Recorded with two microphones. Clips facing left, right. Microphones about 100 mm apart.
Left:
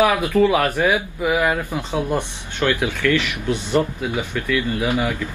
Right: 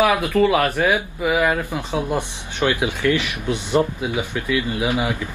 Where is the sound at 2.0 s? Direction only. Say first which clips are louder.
Left 1 dB; 15° right (ahead or behind).